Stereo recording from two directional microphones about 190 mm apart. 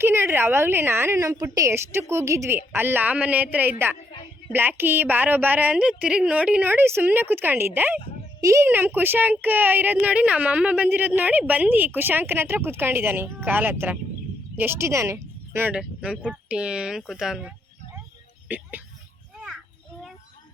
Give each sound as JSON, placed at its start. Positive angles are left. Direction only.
{"t": 0.0, "sound": "a woman's voice", "side_deg": -10}
{"t": 4.1, "sound": "a sound", "side_deg": 25}
{"t": 4.5, "sound": "a woman's voice", "side_deg": -10}
{"t": 18.4, "sound": "music", "side_deg": -10}